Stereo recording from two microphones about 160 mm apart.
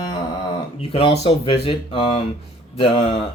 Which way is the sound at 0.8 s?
35° left (ahead or behind).